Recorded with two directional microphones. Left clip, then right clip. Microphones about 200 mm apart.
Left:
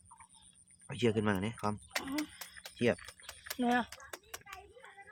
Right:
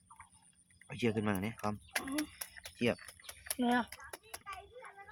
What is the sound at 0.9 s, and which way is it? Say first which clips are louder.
Speech: left 3 dB; 25° left (ahead or behind).